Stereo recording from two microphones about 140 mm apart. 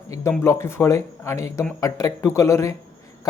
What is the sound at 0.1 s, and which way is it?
Speech, 20° left (ahead or behind).